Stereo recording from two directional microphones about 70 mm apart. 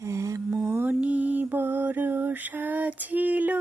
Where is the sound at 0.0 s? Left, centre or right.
Right.